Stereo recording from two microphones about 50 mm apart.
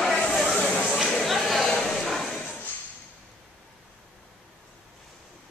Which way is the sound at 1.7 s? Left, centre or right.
Centre.